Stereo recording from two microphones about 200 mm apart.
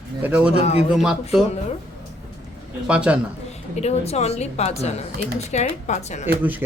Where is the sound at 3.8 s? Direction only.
30° left (ahead or behind).